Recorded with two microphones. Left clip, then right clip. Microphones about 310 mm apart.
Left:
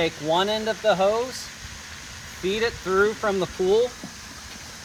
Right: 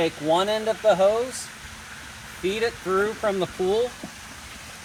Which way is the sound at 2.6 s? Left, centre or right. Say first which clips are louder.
Left 3 dB; centre.